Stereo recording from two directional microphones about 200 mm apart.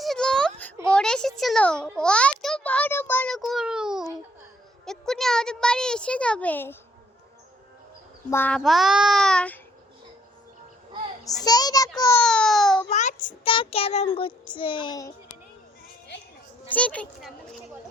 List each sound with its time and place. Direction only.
0.0 s a sound: centre (ahead or behind)
4.9 s a woman's voice: centre (ahead or behind)
8.3 s a woman's voice: 10° left (ahead or behind)
11.4 s a child's voice: 20° left (ahead or behind)
12.2 s baby cry: 5° left (ahead or behind)
12.9 s child singing: 35° left (ahead or behind)
13.5 s a child's voice: 25° left (ahead or behind)
16.7 s a woman's voice: 5° left (ahead or behind)